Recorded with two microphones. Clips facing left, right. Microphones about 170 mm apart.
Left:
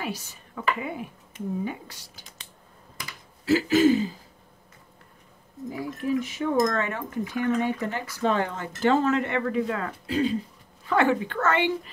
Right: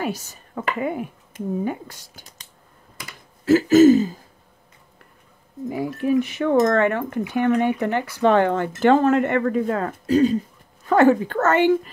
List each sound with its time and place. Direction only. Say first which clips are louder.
0.0 s speech: right 6 dB; 45° right (ahead or behind)
3.4 s speech: right 7 dB; 45° right (ahead or behind)
5.7 s speech: right 6 dB; 70° right (ahead or behind); by 11.9 s 45° right (ahead or behind)